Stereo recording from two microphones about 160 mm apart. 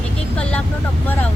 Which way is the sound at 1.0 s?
10° left (ahead or behind).